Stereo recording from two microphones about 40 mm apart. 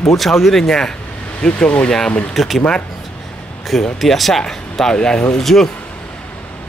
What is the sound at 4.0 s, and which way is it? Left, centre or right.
Speech, centre.